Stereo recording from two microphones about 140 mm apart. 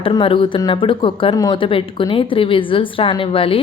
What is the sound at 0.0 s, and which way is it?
Speech, 40° left (ahead or behind).